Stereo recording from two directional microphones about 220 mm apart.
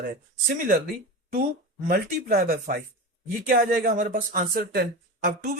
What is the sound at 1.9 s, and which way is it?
Speech, 40° right (ahead or behind).